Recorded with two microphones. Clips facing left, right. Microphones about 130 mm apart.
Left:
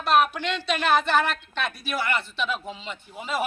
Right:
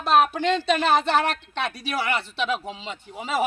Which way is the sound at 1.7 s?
90° right.